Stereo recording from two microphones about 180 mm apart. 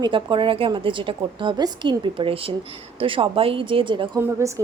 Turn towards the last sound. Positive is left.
turn(degrees=-15)  # may be behind; listen again after turning